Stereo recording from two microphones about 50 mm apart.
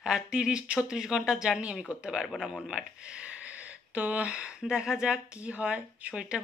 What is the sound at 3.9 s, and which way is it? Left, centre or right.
Speech, right.